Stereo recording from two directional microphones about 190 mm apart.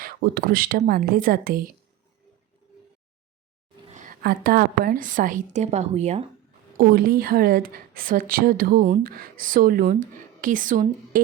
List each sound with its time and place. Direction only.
0.0 s a woman's voice: 50° right (ahead or behind)
3.9 s a woman's voice: 45° right (ahead or behind)
6.7 s a woman's voice: 50° right (ahead or behind)